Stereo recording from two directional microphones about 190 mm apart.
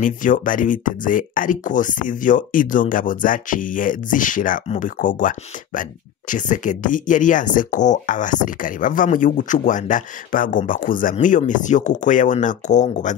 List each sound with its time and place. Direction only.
0.0 s speech: 45° left (ahead or behind)